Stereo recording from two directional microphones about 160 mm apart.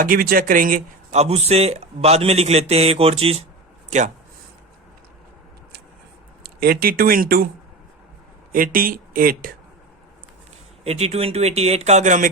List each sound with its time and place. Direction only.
0.0 s speech: 60° right (ahead or behind)
6.4 s speech: 70° right (ahead or behind)
8.5 s speech: 65° right (ahead or behind)
10.8 s speech: 40° right (ahead or behind)